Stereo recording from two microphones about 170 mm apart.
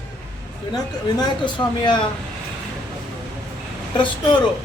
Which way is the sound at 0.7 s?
25° left (ahead or behind).